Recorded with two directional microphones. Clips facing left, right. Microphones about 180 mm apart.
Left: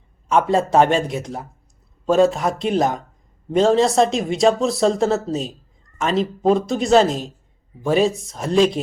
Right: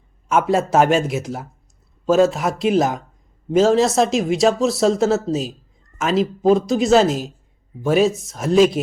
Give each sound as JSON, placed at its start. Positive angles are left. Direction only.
{"t": 0.3, "sound": "speech", "side_deg": -5}